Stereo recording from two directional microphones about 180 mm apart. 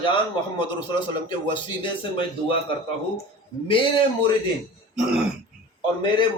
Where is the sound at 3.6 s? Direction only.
30° left (ahead or behind).